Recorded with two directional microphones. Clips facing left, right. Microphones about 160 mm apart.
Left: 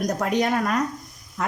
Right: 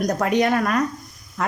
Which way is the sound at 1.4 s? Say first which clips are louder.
Right 2 dB; 70° right (ahead or behind).